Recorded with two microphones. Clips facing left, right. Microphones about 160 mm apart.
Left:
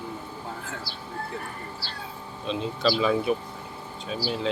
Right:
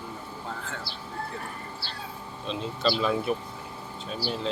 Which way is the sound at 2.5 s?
Centre (ahead or behind).